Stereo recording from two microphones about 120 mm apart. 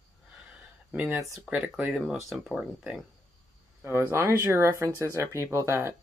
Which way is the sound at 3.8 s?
20° right (ahead or behind).